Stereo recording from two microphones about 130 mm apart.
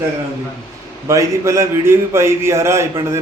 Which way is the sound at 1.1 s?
25° right (ahead or behind).